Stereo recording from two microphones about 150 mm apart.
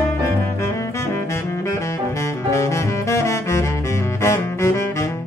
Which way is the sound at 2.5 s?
20° left (ahead or behind).